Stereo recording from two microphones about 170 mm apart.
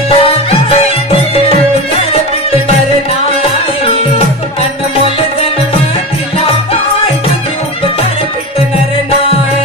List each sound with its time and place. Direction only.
0.1 s music: 35° left (ahead or behind)